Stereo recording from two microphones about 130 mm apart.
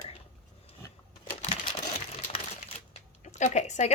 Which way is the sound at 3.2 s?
65° left (ahead or behind).